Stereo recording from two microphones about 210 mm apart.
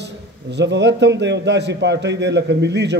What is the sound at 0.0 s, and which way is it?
A man's voice, 55° right (ahead or behind).